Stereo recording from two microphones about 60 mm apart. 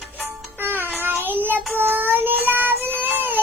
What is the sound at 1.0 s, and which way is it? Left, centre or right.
Child singing, right.